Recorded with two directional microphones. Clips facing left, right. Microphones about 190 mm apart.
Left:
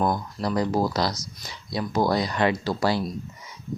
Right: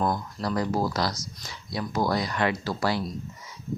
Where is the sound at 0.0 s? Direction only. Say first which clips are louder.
Left 2 dB; 20° left (ahead or behind).